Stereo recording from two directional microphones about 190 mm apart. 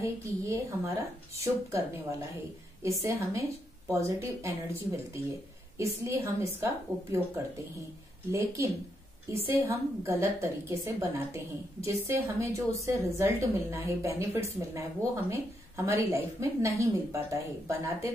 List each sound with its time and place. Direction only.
0.0 s a woman's voice: 15° right (ahead or behind)
2.8 s a woman's voice: 15° right (ahead or behind)
8.3 s a woman's voice: 15° right (ahead or behind)